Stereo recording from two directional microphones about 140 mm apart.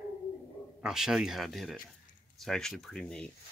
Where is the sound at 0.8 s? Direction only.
5° right (ahead or behind).